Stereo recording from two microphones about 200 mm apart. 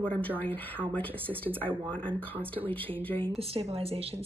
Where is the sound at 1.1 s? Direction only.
10° right (ahead or behind).